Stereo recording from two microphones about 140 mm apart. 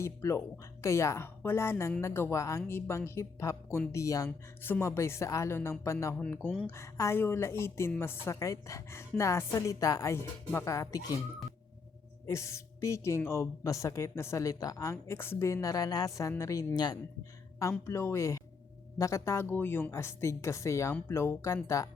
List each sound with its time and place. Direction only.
0.0 s a woman's voice: 20° left (ahead or behind)
12.3 s a woman's voice: 20° left (ahead or behind)
17.6 s a woman's voice: 20° left (ahead or behind)